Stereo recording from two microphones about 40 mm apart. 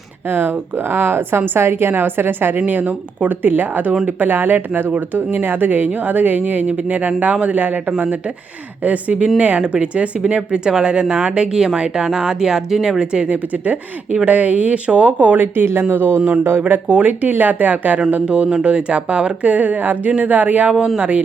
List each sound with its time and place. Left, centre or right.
0.3 s speech: right
1.5 s a woman's voice: right
2.6 s speech: right
6.7 s speech: right
9.6 s speech: right; by 13.0 s centre
13.0 s speech: right
13.2 s speech: right
15.6 s a woman's voice: right
16.9 s speech: right
18.3 s speech: right
20.7 s speech: centre